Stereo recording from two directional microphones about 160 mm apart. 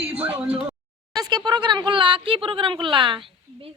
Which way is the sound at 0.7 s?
25° right (ahead or behind).